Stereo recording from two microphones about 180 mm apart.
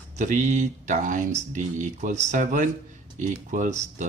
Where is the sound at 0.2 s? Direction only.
40° right (ahead or behind).